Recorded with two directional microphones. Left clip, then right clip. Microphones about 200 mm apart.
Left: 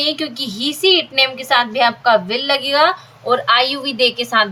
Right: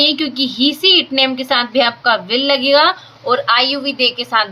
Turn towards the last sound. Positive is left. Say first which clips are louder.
# even
turn(degrees=-5)  # may be behind; listen again after turning